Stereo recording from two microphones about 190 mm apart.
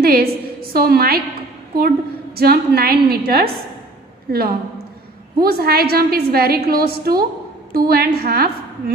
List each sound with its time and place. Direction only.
0.0 s a woman's voice: 50° right (ahead or behind)
2.3 s a woman's voice: 55° right (ahead or behind)